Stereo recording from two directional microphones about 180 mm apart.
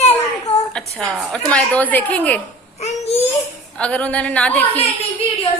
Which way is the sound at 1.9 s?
10° left (ahead or behind).